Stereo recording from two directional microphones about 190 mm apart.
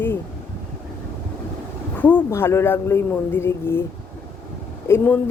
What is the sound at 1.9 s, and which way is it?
A woman's voice, 10° left (ahead or behind).